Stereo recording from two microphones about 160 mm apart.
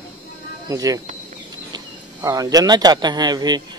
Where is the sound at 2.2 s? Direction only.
20° right (ahead or behind).